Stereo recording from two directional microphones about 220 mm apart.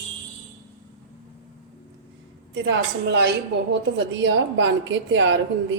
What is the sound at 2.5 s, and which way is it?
A woman's voice, 55° right (ahead or behind).